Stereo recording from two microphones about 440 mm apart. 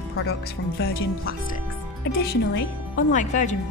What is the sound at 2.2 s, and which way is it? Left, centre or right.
Speech, left.